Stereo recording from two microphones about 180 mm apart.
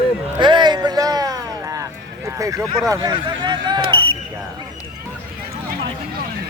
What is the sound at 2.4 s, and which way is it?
Speech, 15° right (ahead or behind).